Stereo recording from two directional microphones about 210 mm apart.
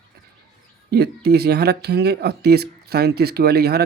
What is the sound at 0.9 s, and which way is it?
Speech, 50° right (ahead or behind).